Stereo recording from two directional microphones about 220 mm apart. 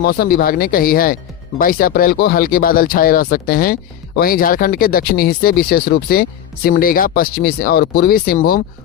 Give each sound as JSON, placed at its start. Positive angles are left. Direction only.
{"t": 0.0, "sound": "speech", "side_deg": 45}